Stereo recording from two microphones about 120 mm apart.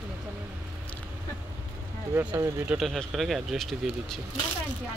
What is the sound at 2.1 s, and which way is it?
Speech, 20° right (ahead or behind).